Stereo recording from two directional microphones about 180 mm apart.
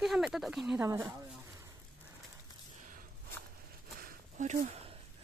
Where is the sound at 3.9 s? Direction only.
50° right (ahead or behind).